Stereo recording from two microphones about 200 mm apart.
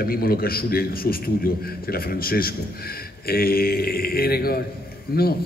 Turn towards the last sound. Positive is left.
turn(degrees=50)  # may be behind; listen again after turning